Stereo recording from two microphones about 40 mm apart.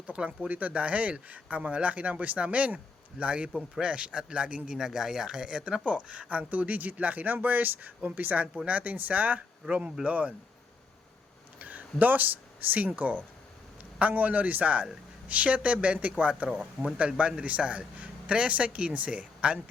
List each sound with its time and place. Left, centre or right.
0.3 s a man's voice: right
4.8 s a man's voice: centre; by 6.2 s right
6.3 s speech: right
7.3 s speech: right
9.6 s speech: right
11.6 s speech: right
14.0 s speech: right
16.5 s speech: centre
17.4 s speech: right